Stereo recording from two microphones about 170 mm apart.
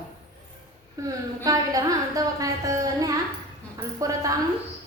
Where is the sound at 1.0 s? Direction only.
20° right (ahead or behind).